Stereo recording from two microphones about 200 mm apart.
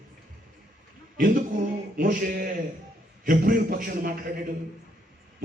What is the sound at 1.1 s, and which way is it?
A man's voice, 45° right (ahead or behind).